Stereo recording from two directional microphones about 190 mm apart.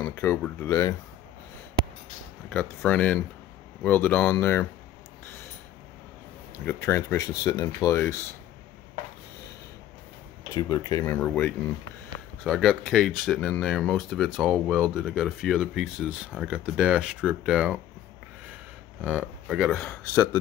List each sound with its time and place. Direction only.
0.0 s speech: 15° left (ahead or behind)
2.5 s speech: 5° left (ahead or behind)
6.6 s speech: 15° left (ahead or behind)
10.5 s speech: 20° left (ahead or behind); by 17.7 s 5° right (ahead or behind)
18.9 s speech: 10° right (ahead or behind)